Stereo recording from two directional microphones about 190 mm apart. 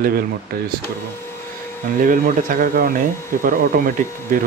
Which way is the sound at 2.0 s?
45° right (ahead or behind).